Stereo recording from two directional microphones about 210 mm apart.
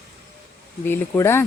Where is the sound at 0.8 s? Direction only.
10° left (ahead or behind).